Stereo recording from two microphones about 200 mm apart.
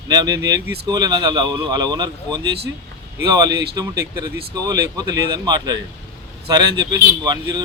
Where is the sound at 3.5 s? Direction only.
55° right (ahead or behind).